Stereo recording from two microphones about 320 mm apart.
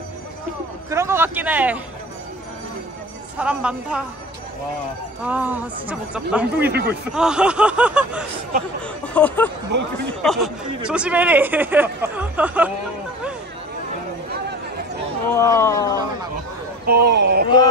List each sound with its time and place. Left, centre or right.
0.8 s a man's voice: centre
3.3 s speech: centre
5.2 s speech: centre
15.2 s speech: centre
16.8 s speech: right